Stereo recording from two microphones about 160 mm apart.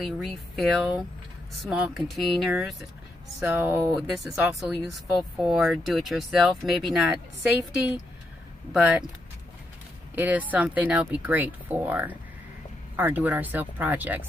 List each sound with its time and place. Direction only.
0.0 s speech: centre (ahead or behind)
3.4 s speech: 10° right (ahead or behind)
3.9 s speech: centre (ahead or behind)
8.7 s speech: 5° right (ahead or behind)
10.1 s speech: 10° right (ahead or behind)